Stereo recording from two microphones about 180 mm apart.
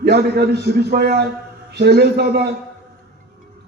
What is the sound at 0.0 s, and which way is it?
A man's voice, 65° right (ahead or behind).